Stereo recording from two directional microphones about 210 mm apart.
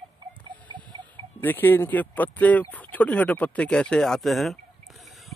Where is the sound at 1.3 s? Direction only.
10° left (ahead or behind).